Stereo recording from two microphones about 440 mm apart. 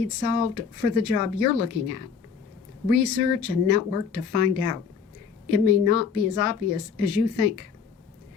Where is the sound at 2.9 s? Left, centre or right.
Left.